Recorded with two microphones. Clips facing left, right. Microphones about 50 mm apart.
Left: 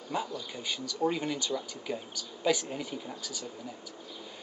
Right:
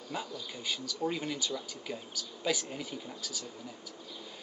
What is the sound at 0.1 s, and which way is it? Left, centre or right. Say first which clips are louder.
Speech: left 5 dB; centre.